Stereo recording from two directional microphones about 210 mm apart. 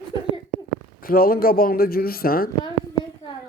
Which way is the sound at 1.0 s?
45° left (ahead or behind).